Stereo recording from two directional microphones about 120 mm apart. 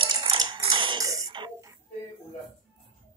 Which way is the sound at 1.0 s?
30° right (ahead or behind).